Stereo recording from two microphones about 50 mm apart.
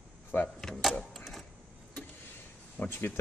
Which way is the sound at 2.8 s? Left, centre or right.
Left.